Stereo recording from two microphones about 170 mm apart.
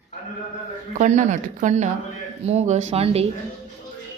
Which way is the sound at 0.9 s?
45° right (ahead or behind).